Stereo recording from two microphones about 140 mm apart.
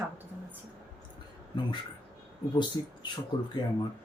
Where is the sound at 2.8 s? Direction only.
35° left (ahead or behind).